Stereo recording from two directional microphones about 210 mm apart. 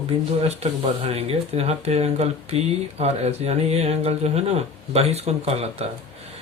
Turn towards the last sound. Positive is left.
turn(degrees=-30)  # may be behind; listen again after turning